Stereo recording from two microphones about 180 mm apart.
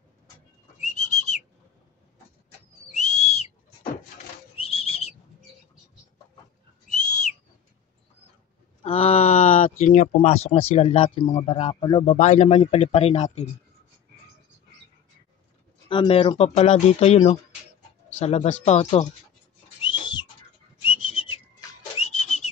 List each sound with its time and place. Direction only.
0.7 s whistling: 40° left (ahead or behind)
2.9 s whistle: 40° left (ahead or behind)
4.6 s owl: 30° left (ahead or behind)
6.9 s whistle: 40° left (ahead or behind)
8.8 s speech: 35° left (ahead or behind)
12.2 s speech: 40° left (ahead or behind)
15.9 s speech: 30° left (ahead or behind)
19.8 s a sound: 25° left (ahead or behind)
20.8 s whistling: 30° left (ahead or behind)
22.0 s whistle: 35° left (ahead or behind)